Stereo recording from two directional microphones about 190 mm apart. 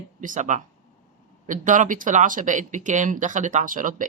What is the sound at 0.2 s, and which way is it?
Speech, 40° right (ahead or behind).